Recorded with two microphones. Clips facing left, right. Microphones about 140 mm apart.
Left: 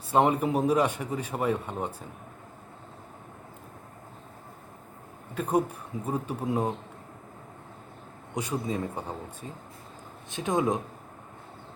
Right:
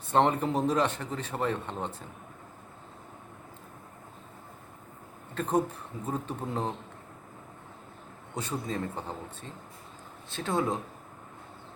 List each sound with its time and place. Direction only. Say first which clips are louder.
0.1 s a man's voice: left 2 dB; 10° left (ahead or behind)
5.3 s a man's voice: left 1 dB; 10° left (ahead or behind)
8.4 s a man's voice: left 3 dB; 10° left (ahead or behind)